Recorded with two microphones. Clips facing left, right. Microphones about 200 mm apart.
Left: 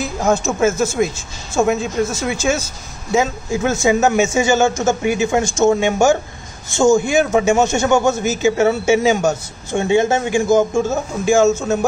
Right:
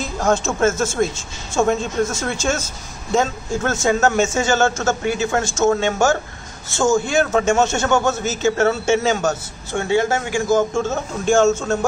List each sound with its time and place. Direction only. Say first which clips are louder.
0.0 s a man's voice: left 2 dB; 5° left (ahead or behind)